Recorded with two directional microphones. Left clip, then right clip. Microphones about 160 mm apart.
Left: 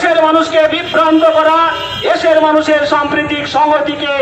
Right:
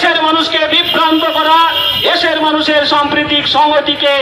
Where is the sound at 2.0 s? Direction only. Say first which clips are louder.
Left 6 dB; 45° left (ahead or behind).